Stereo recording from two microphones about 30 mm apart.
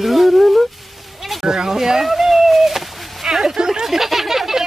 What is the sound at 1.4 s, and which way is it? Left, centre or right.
Speech, right.